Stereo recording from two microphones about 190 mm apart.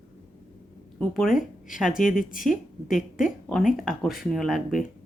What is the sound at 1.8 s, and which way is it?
Speech, 45° left (ahead or behind).